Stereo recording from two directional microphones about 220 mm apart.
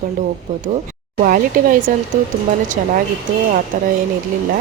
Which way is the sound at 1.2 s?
40° right (ahead or behind).